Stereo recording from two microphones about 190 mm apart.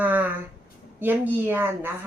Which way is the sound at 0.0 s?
10° right (ahead or behind).